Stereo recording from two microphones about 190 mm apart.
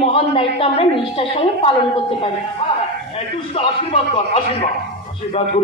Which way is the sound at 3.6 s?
30° left (ahead or behind).